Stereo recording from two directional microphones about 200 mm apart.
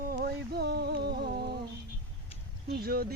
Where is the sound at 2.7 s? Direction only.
50° right (ahead or behind).